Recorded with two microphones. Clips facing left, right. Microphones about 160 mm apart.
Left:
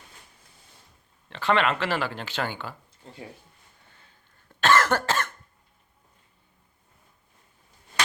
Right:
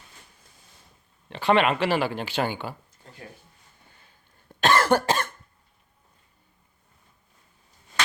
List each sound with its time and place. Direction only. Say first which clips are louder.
1.3 s speech: right 3 dB; 15° right (ahead or behind)
4.4 s cough: right 1 dB; 15° right (ahead or behind)